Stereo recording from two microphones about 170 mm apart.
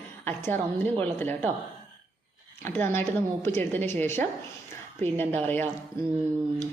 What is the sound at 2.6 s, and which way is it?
A woman's voice, 10° left (ahead or behind).